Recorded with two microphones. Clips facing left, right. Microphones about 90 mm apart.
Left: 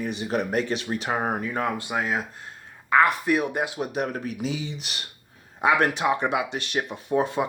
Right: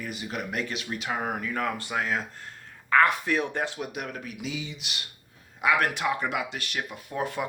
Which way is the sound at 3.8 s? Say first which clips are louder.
Left 7 dB; 35° left (ahead or behind).